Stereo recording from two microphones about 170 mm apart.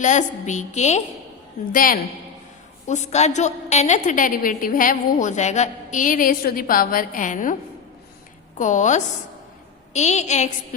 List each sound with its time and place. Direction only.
0.0 s a woman's voice: 45° left (ahead or behind)
1.7 s a woman's voice: 55° left (ahead or behind)
2.8 s a woman's voice: 45° left (ahead or behind)
8.5 s a woman's voice: 45° left (ahead or behind)